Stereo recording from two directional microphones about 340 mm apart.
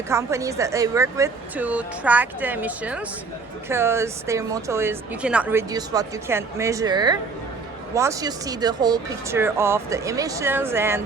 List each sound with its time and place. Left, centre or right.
0.1 s speech: centre